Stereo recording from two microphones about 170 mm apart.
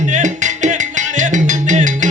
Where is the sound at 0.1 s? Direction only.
45° right (ahead or behind).